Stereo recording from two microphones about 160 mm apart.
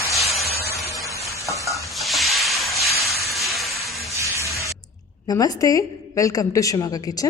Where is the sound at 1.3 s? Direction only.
20° right (ahead or behind).